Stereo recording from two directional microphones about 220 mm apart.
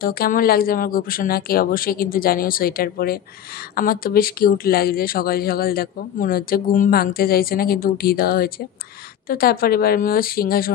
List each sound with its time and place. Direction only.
0.0 s speech: 40° left (ahead or behind)